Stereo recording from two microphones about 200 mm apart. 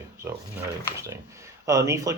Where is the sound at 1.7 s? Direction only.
15° right (ahead or behind).